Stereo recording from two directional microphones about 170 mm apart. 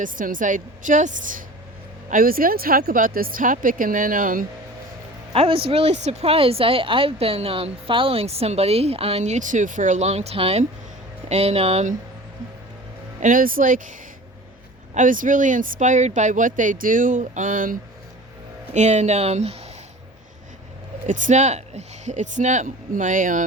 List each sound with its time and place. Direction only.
0.0 s speech: 50° right (ahead or behind)
5.3 s a woman's voice: 35° right (ahead or behind)
13.1 s speech: 50° right (ahead or behind)
14.9 s a woman's voice: 50° right (ahead or behind)
21.1 s speech: 45° right (ahead or behind)